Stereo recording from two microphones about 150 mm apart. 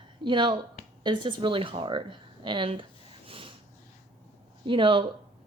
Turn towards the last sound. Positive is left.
turn(degrees=-35)  # may be behind; listen again after turning